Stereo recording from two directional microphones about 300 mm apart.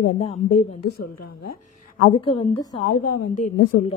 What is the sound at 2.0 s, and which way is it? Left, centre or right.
Speech, centre.